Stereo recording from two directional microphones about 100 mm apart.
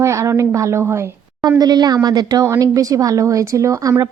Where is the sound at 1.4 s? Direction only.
40° right (ahead or behind).